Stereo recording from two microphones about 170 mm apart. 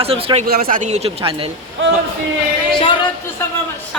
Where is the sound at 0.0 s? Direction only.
35° right (ahead or behind).